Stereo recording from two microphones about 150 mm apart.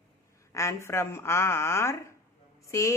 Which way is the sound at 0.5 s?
20° left (ahead or behind).